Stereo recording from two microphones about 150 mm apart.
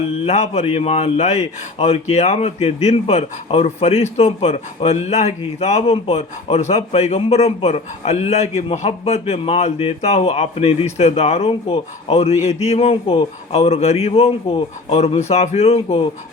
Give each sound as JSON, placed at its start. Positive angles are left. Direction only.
{"t": 0.3, "sound": "a man's voice", "side_deg": 45}